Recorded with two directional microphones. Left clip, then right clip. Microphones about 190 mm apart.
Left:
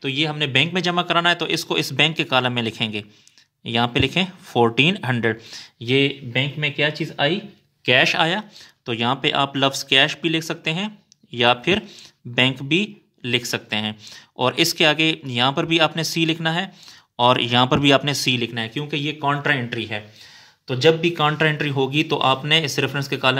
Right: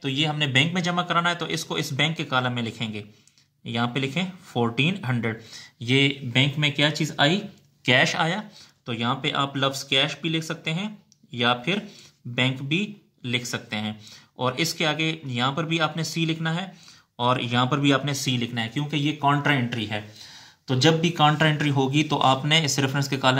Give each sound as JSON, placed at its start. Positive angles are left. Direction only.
{"t": 0.0, "sound": "speech", "side_deg": 30}
{"t": 6.3, "sound": "speech", "side_deg": 15}
{"t": 7.8, "sound": "speech", "side_deg": 30}